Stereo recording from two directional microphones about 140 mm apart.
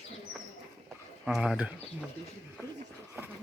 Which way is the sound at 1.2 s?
5° right (ahead or behind).